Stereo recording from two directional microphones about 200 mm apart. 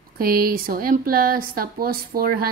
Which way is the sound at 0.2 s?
45° right (ahead or behind).